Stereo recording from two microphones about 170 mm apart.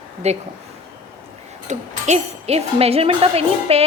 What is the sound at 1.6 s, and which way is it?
Speech, 40° right (ahead or behind).